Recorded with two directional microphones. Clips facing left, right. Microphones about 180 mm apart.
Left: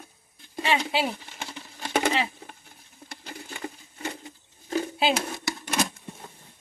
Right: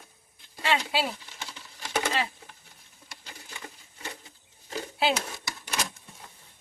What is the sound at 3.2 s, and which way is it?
Patter, 55° left (ahead or behind).